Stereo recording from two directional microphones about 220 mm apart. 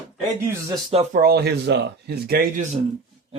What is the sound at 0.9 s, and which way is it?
Speech, 35° right (ahead or behind).